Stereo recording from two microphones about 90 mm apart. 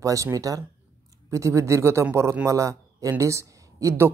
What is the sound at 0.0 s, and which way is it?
A man's voice, 40° right (ahead or behind).